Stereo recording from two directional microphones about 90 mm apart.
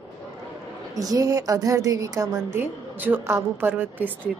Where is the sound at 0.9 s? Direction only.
40° right (ahead or behind).